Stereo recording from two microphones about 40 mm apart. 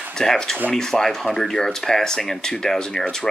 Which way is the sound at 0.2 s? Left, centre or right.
Centre.